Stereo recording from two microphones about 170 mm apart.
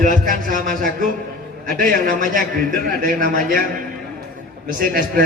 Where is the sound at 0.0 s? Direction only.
50° right (ahead or behind).